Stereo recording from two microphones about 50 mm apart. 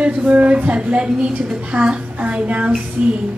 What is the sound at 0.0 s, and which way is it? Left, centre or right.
A child's voice, right.